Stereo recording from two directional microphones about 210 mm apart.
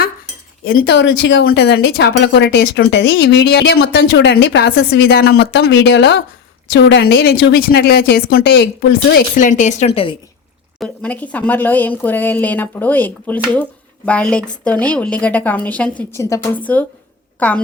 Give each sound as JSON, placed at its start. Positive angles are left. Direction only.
{"t": 0.6, "sound": "a woman's voice", "side_deg": 45}
{"t": 10.8, "sound": "speech", "side_deg": 5}